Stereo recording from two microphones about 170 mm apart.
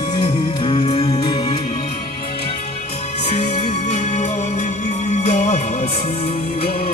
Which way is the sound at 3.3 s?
45° left (ahead or behind).